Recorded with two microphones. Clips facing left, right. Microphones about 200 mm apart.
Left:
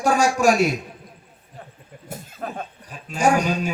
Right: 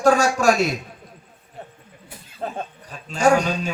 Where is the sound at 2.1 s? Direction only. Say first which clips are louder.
Left 11 dB; 45° left (ahead or behind).